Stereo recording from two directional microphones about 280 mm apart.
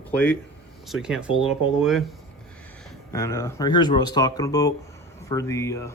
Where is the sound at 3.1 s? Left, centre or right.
Centre.